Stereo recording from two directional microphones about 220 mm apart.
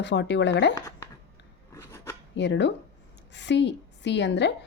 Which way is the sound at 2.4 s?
55° left (ahead or behind).